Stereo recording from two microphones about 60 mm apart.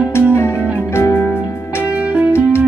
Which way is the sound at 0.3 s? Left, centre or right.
Left.